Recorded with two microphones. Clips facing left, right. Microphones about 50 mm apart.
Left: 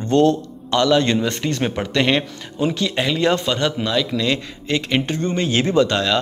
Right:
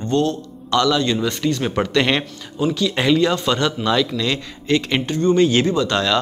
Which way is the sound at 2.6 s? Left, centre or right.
Left.